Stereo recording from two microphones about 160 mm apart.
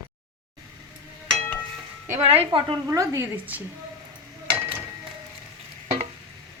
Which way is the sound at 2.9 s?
20° right (ahead or behind).